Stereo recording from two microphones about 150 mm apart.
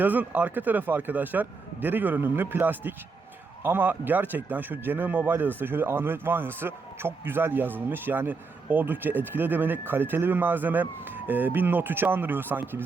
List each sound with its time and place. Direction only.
0.0 s speech: 10° right (ahead or behind)